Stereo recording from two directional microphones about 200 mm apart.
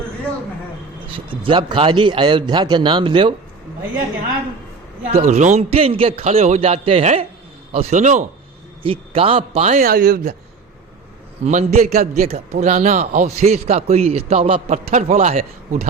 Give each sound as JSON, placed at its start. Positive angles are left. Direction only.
{"t": 1.0, "sound": "a man's voice", "side_deg": -25}
{"t": 5.1, "sound": "a man's voice", "side_deg": -35}
{"t": 8.8, "sound": "a man's voice", "side_deg": -25}
{"t": 9.8, "sound": "speech", "side_deg": -50}
{"t": 11.4, "sound": "a man's voice", "side_deg": -35}
{"t": 11.9, "sound": "speech", "side_deg": -45}
{"t": 12.3, "sound": "a man's voice", "side_deg": -35}